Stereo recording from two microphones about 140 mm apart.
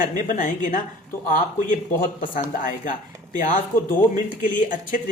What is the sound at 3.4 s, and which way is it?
Speech, 75° left (ahead or behind).